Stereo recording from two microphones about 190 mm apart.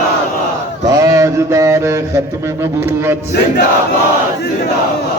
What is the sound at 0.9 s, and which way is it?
Mantra, 20° right (ahead or behind).